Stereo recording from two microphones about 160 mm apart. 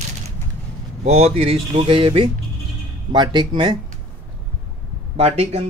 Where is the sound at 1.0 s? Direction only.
40° right (ahead or behind).